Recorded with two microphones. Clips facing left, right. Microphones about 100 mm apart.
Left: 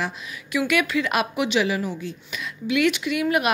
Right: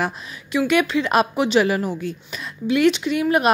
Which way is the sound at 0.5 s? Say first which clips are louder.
Right 4 dB; 30° right (ahead or behind).